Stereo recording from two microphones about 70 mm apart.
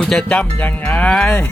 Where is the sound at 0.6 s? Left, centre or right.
Left.